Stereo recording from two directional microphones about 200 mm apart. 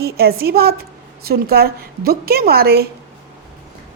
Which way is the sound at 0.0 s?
50° right (ahead or behind).